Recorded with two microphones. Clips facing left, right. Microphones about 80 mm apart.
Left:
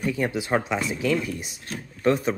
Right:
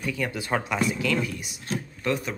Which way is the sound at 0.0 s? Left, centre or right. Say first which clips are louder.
Left 4 dB; left.